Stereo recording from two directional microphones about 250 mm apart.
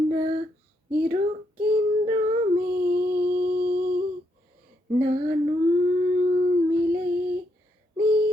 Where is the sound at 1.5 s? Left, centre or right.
Right.